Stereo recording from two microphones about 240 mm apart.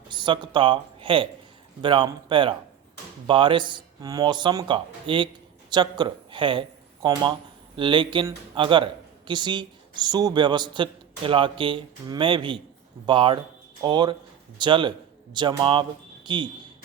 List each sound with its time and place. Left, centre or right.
0.1 s a man's voice: centre